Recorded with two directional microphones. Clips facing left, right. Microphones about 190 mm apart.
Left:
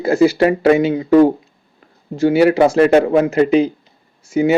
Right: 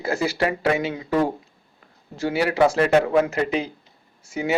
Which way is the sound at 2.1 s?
20° left (ahead or behind).